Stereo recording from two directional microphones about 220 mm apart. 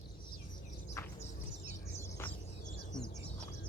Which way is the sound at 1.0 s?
10° left (ahead or behind).